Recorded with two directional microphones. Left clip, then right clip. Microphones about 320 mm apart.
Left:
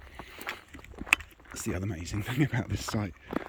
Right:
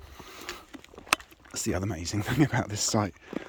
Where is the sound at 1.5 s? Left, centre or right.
Centre.